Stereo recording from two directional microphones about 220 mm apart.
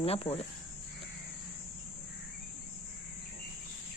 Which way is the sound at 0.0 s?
25° left (ahead or behind).